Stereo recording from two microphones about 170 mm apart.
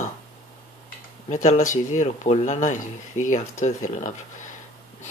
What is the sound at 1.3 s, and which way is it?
Speech, 45° left (ahead or behind).